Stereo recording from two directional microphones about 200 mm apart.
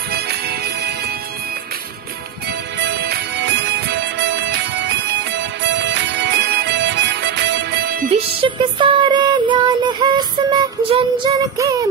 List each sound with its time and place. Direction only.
0.1 s music: 55° right (ahead or behind)
2.8 s music: 55° right (ahead or behind)
8.1 s music: 25° right (ahead or behind)